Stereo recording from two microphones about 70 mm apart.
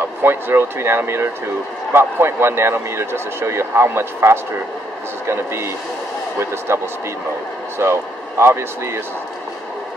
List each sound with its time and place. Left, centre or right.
0.0 s a man's voice: right
6.7 s a man's voice: right